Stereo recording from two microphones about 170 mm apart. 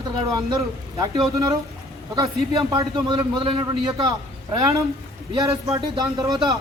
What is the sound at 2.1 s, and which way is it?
A man's voice, 20° right (ahead or behind).